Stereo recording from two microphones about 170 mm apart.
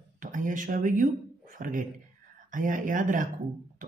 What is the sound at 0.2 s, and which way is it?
Speech, 50° right (ahead or behind).